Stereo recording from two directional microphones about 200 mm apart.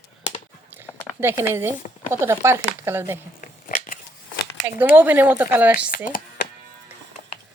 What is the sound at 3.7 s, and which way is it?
Biting, 40° left (ahead or behind).